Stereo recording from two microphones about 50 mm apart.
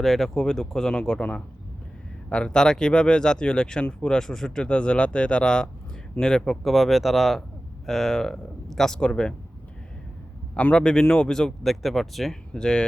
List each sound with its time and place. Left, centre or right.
0.0 s a man's voice: centre
2.3 s a man's voice: centre
6.7 s a man's voice: centre
10.5 s a man's voice: left; by 12.4 s centre
12.5 s a man's voice: centre